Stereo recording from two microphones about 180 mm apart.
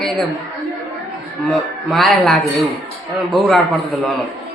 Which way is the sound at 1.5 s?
Centre (ahead or behind).